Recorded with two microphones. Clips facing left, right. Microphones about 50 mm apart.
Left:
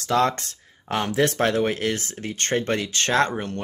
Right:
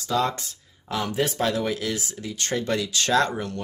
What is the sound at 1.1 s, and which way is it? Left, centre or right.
Speech, left.